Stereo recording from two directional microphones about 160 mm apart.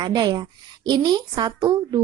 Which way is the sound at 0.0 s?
25° right (ahead or behind).